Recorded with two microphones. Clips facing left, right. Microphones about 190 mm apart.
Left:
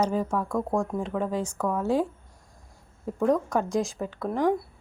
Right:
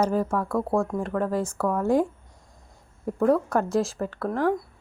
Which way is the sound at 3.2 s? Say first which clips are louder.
Right 2 dB; 5° right (ahead or behind).